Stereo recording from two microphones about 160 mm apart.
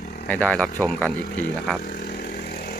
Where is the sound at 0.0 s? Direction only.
90° left.